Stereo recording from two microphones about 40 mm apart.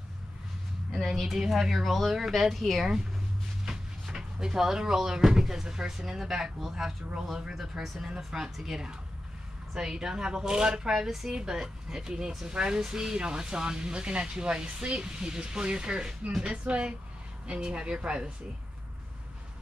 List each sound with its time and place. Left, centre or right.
0.9 s speech: centre
1.3 s speech: centre
3.6 s speech: centre
8.2 s speech: centre
12.5 s speech: right